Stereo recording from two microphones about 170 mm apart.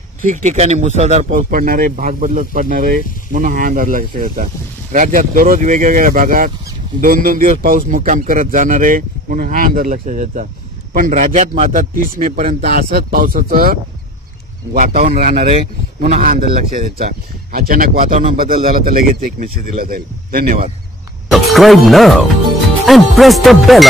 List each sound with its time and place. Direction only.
0.3 s speech: 45° right (ahead or behind)
1.3 s a man's voice: 55° right (ahead or behind)
21.3 s speech: centre (ahead or behind)